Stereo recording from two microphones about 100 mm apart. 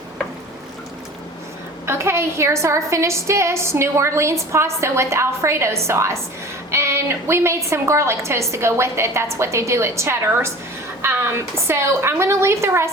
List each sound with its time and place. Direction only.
1.9 s a woman's voice: 25° right (ahead or behind)